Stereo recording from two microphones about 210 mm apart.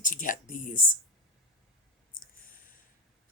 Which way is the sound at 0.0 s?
40° left (ahead or behind).